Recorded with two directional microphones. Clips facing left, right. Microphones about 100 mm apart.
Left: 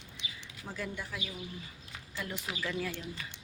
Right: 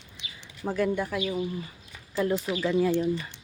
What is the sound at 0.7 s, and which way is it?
Speech, 60° right (ahead or behind).